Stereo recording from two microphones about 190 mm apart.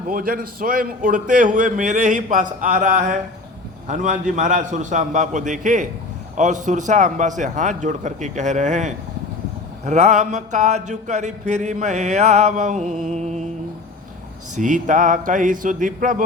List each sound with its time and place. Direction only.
0.1 s a man's voice: 50° right (ahead or behind)
3.8 s a sound: 40° right (ahead or behind)
14.5 s a man's voice: 40° right (ahead or behind)